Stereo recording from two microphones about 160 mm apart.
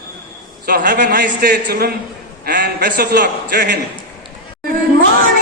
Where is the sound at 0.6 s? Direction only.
65° right (ahead or behind).